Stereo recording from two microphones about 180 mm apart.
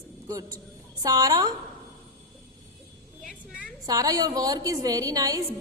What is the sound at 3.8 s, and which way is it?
A woman's voice, 20° right (ahead or behind).